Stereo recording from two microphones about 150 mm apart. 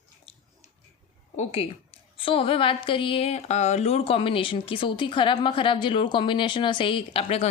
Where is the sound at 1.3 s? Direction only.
45° left (ahead or behind).